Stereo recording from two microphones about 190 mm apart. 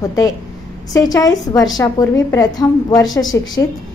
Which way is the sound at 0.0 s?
15° left (ahead or behind).